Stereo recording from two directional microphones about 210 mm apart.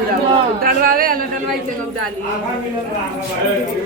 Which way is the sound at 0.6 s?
45° right (ahead or behind).